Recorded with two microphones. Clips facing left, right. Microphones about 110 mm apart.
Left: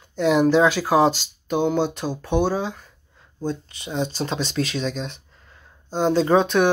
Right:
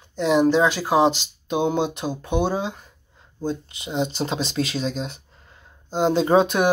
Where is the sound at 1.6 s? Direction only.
25° right (ahead or behind).